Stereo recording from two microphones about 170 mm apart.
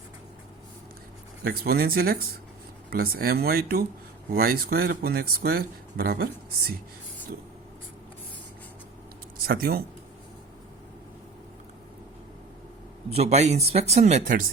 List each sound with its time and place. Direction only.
1.5 s speech: 65° right (ahead or behind)
9.5 s speech: 60° right (ahead or behind)
13.1 s speech: 35° right (ahead or behind)